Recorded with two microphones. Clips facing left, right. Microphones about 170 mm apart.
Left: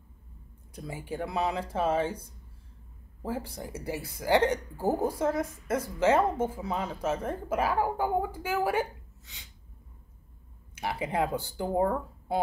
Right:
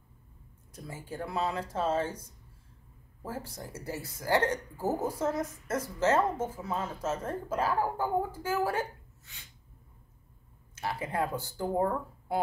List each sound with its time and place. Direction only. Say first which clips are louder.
0.7 s a woman's voice: left 4 dB; 15° left (ahead or behind)
3.2 s a woman's voice: left 5 dB; 15° left (ahead or behind)
10.8 s a woman's voice: left 3 dB; 15° left (ahead or behind)